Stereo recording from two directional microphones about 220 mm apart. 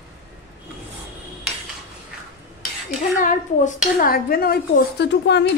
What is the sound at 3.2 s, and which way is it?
A woman's voice, 35° left (ahead or behind).